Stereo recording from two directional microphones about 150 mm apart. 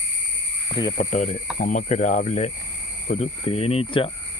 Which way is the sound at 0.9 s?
50° left (ahead or behind).